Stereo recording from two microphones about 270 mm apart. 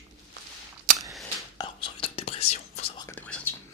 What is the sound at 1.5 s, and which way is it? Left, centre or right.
Whispering, centre.